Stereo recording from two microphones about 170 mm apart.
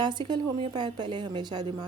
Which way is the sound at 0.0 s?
25° right (ahead or behind).